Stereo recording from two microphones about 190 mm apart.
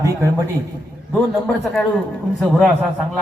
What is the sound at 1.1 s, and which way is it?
A man's voice, 5° left (ahead or behind).